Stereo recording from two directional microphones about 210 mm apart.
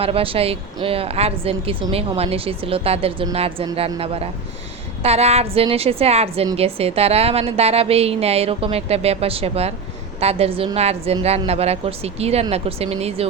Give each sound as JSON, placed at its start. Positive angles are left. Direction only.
{"t": 0.0, "sound": "a woman's voice", "side_deg": -25}